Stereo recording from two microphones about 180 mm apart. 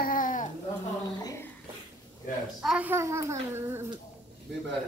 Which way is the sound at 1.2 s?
15° left (ahead or behind).